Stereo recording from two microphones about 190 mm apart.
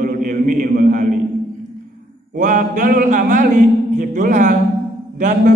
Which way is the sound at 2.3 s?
45° right (ahead or behind).